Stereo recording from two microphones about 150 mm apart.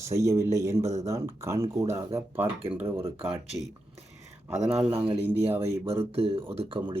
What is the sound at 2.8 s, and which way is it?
Speech, 40° right (ahead or behind).